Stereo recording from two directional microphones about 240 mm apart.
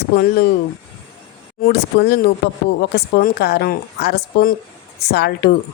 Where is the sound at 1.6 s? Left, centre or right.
Left.